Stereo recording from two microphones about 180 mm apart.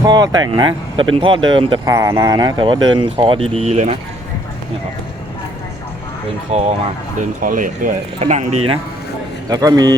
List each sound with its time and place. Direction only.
0.0 s speech: 20° right (ahead or behind); by 3.9 s 35° right (ahead or behind)
6.5 s speech: 35° right (ahead or behind)
7.4 s speech: 50° right (ahead or behind)
9.5 s speech: 20° right (ahead or behind)